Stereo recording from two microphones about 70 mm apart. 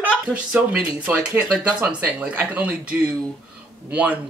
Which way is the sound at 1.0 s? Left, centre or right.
Right.